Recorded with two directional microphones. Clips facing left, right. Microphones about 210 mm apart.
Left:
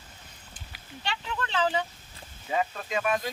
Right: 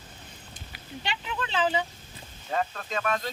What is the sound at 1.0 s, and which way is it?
Speech, 15° right (ahead or behind).